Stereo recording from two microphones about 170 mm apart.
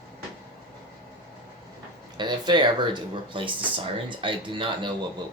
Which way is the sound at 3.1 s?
30° right (ahead or behind).